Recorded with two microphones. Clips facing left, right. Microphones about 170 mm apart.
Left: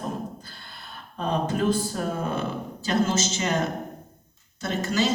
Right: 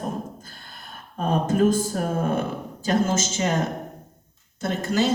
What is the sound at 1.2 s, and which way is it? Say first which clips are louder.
A woman's voice: right 5 dB; 45° right (ahead or behind).